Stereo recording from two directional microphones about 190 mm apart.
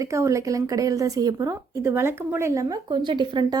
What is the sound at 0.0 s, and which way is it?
A woman's voice, 15° right (ahead or behind).